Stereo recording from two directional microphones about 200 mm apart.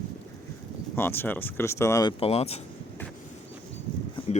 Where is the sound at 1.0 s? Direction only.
10° left (ahead or behind).